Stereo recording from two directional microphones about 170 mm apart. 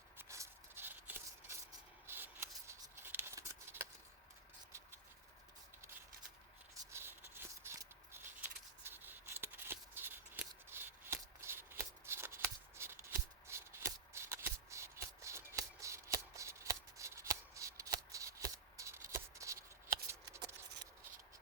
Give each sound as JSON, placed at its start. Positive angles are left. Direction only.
{"t": 0.2, "sound": "rub", "side_deg": -15}
{"t": 2.0, "sound": "scissors", "side_deg": -10}
{"t": 6.7, "sound": "a sound", "side_deg": -15}